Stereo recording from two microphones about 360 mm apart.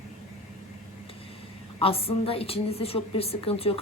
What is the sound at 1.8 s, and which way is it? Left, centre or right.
Speech, centre.